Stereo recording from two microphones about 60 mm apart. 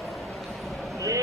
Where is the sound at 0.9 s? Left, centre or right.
Right.